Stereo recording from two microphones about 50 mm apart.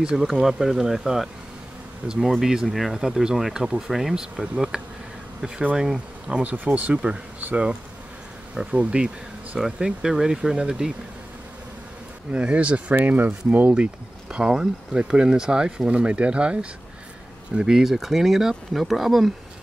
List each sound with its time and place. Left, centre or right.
0.2 s speech: centre
2.0 s speech: right
2.4 s speech: centre
6.4 s speech: right
8.7 s speech: right
9.6 s speech: centre
12.3 s speech: right
14.3 s speech: centre
17.6 s speech: centre